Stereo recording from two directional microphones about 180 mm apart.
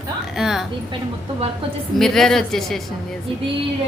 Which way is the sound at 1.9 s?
Centre (ahead or behind).